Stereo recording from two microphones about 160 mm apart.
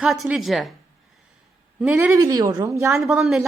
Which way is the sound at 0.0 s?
5° right (ahead or behind).